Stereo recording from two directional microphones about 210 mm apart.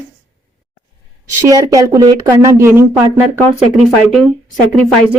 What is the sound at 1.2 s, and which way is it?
A woman's voice, 15° right (ahead or behind).